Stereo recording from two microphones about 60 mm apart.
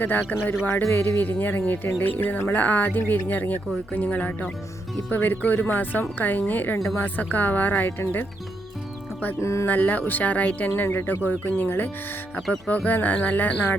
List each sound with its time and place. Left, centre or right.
0.0 s speech: left
9.4 s speech: left
9.6 s speech: left
10.8 s speech: left